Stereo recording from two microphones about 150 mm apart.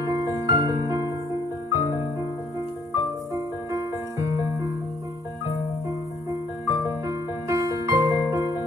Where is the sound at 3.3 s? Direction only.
20° right (ahead or behind).